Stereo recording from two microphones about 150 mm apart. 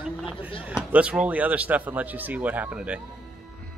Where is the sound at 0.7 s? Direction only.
10° right (ahead or behind).